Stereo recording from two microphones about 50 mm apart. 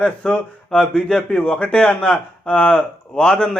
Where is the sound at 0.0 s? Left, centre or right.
Left.